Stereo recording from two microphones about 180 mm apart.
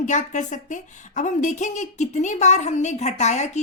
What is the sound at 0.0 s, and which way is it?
A woman's voice, 40° left (ahead or behind).